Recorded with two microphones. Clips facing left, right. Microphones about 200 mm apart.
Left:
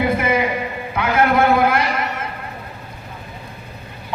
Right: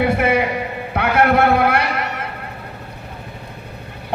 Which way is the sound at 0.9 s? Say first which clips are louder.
Right 1 dB; 65° right (ahead or behind).